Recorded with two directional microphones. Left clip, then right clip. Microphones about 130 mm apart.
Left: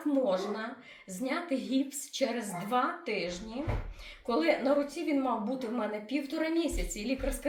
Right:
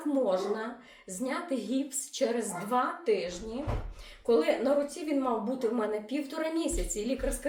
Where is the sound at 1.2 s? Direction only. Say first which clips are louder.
Even; 50° right (ahead or behind).